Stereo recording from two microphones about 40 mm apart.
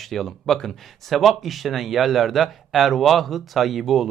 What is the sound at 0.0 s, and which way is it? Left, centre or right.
Speech, centre.